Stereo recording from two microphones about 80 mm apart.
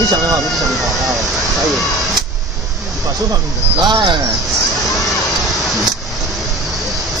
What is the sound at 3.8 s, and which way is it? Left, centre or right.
Speech, right.